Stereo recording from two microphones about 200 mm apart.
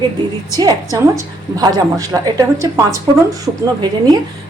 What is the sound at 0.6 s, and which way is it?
A woman's voice, 15° right (ahead or behind).